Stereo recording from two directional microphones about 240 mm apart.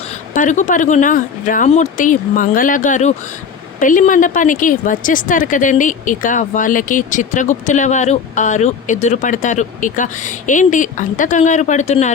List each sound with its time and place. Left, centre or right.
0.3 s a woman's voice: left